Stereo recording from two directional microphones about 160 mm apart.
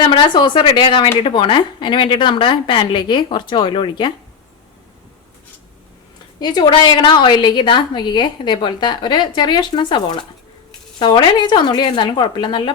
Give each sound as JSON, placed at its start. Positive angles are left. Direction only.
{"t": 0.0, "sound": "a woman's voice", "side_deg": 30}
{"t": 6.4, "sound": "a woman's voice", "side_deg": 25}